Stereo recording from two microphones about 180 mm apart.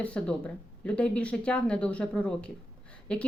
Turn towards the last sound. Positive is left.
turn(degrees=5)  # may be behind; listen again after turning